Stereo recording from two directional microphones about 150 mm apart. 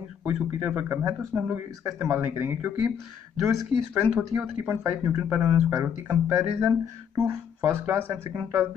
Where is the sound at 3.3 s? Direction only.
Centre (ahead or behind).